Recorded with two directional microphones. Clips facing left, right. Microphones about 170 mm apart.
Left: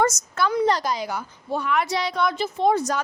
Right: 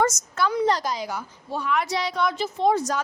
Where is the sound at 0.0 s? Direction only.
60° left (ahead or behind).